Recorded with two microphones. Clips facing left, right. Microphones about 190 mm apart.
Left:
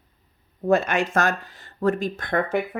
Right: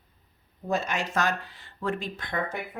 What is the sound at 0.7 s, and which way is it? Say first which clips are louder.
Speech: left 8 dB; 60° left (ahead or behind).